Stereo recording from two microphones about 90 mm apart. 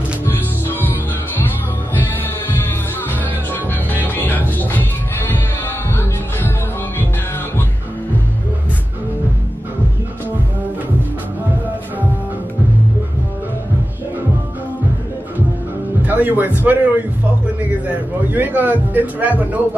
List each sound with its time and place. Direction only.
0.2 s music: 25° left (ahead or behind)
3.1 s music: 20° left (ahead or behind)
16.1 s a man's voice: 20° right (ahead or behind)